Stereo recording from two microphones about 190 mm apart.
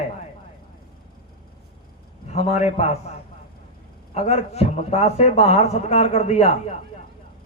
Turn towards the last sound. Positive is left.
turn(degrees=35)  # may be behind; listen again after turning